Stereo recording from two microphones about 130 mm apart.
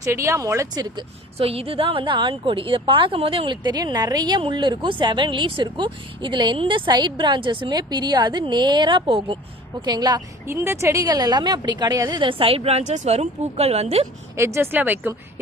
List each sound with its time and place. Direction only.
0.0 s speech: 20° right (ahead or behind)
1.4 s a woman's voice: 45° right (ahead or behind)
9.8 s a woman's voice: 30° right (ahead or behind)
10.4 s a woman's voice: 15° right (ahead or behind); by 14.1 s 55° right (ahead or behind)
14.3 s a woman's voice: 20° right (ahead or behind)